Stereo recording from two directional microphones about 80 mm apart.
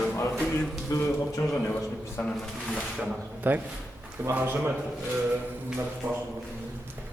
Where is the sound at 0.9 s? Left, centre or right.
Left.